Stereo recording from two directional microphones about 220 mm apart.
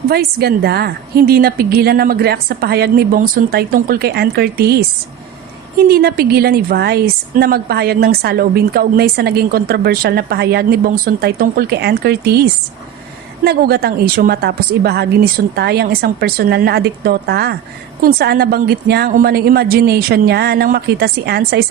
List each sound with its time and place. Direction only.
0.1 s a woman's voice: 45° right (ahead or behind)
13.4 s a woman's voice: 45° right (ahead or behind)